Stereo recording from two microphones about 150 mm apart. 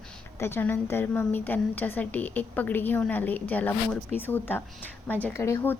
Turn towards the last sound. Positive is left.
turn(degrees=15)  # may be behind; listen again after turning